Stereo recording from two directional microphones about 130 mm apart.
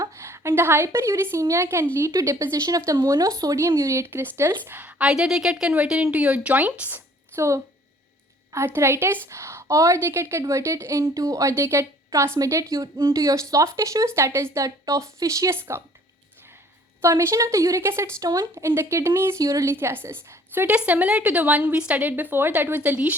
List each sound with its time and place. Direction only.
0.0 s a woman's voice: 20° right (ahead or behind)
17.0 s a woman's voice: 20° right (ahead or behind)